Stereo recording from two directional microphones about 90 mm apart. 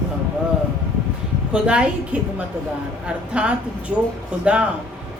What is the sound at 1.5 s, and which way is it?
A woman's voice, 10° right (ahead or behind).